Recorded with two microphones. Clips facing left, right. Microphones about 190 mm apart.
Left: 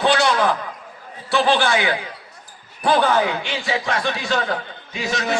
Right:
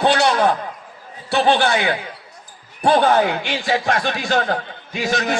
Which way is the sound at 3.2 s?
45° right (ahead or behind).